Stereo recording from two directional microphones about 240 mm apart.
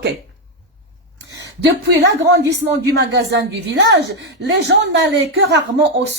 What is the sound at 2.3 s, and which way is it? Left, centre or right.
Speech, right.